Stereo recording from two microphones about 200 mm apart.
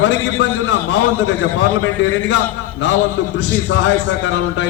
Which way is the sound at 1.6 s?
65° left (ahead or behind).